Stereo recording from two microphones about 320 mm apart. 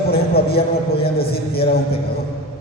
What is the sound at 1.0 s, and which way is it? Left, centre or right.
Speech, left.